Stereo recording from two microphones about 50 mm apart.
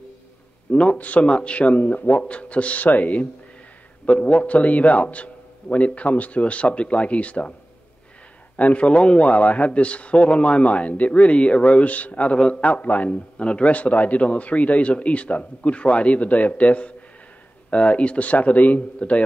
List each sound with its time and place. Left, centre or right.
0.7 s a man's voice: left
8.5 s a man's voice: left